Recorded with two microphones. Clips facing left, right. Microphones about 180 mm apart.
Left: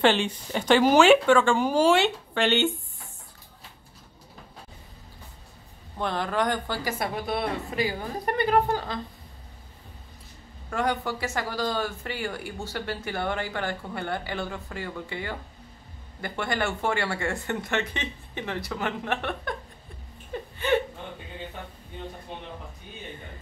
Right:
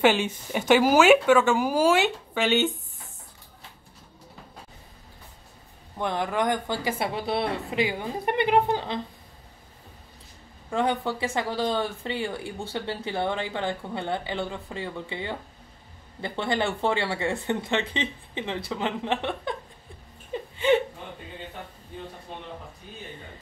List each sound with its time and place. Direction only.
0.0 s speech: 10° right (ahead or behind)
5.9 s speech: 15° right (ahead or behind)
10.7 s speech: 25° right (ahead or behind)
20.3 s a sound: 15° right (ahead or behind)